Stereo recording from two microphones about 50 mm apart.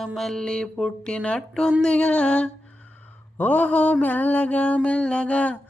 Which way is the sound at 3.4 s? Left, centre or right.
Left.